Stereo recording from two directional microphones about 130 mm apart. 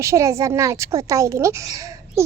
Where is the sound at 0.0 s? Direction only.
25° right (ahead or behind).